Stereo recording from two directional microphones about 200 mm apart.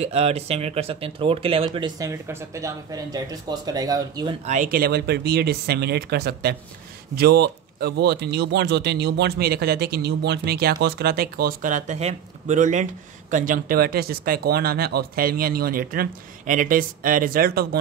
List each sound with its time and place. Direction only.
0.0 s speech: 30° right (ahead or behind)
4.5 s speech: 45° right (ahead or behind)